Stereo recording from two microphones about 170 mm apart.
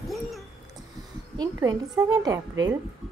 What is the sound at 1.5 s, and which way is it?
A woman's voice, 20° right (ahead or behind).